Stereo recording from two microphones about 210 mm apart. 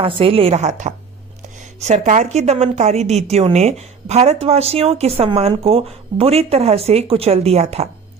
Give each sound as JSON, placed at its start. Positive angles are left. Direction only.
{"t": 0.0, "sound": "a woman's voice", "side_deg": -25}